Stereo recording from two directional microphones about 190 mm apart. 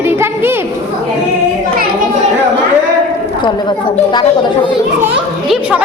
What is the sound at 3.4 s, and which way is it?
Speech, 25° left (ahead or behind).